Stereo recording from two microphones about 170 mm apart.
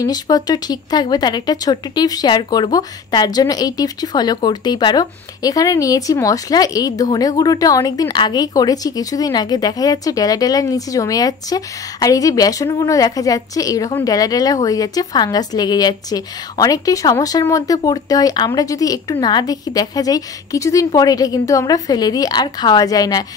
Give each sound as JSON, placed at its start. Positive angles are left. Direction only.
{"t": 0.0, "sound": "a woman's voice", "side_deg": 20}